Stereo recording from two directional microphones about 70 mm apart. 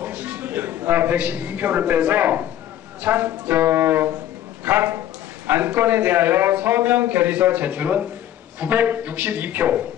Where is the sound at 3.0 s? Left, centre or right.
Right.